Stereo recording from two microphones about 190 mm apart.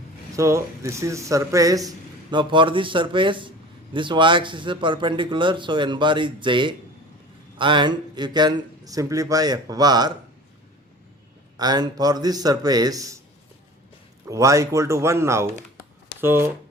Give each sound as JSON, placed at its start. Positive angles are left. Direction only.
{"t": 0.3, "sound": "speech", "side_deg": -15}
{"t": 11.5, "sound": "speech", "side_deg": -20}
{"t": 14.3, "sound": "speech", "side_deg": -15}